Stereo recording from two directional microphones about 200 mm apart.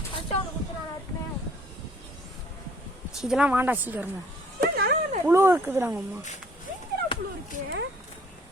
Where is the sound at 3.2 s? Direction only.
5° right (ahead or behind).